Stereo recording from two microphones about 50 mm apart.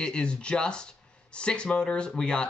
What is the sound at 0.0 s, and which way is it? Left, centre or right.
Speech, centre.